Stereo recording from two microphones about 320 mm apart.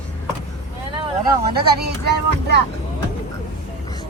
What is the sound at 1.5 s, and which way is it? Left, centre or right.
Speech, right.